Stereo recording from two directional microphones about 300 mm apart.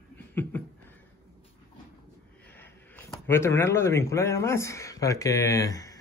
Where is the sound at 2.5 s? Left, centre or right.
Centre.